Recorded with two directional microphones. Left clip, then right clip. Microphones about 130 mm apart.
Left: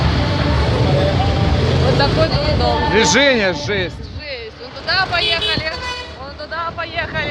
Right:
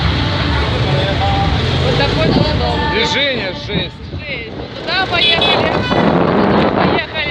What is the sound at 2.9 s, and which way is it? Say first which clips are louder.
Speech: left 5 dB; 90° left.